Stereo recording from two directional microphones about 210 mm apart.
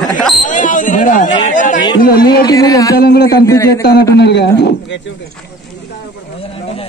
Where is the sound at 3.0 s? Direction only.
50° left (ahead or behind).